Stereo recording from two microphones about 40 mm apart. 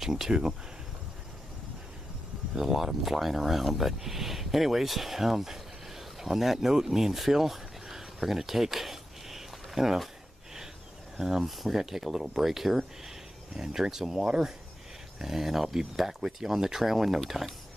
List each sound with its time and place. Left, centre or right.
0.0 s speech: centre
2.5 s speech: centre
11.1 s speech: centre